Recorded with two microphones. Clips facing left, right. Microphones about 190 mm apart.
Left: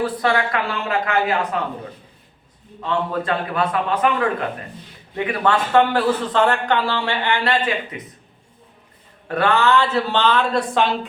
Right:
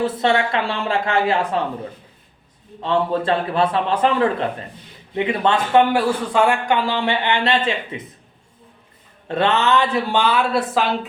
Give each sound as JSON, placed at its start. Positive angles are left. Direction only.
{"t": 0.0, "sound": "a man's voice", "side_deg": -25}
{"t": 2.8, "sound": "a man's voice", "side_deg": -30}
{"t": 9.2, "sound": "a man's voice", "side_deg": -25}